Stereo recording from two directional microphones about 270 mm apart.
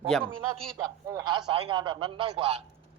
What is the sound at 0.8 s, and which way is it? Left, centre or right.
A man's voice, centre.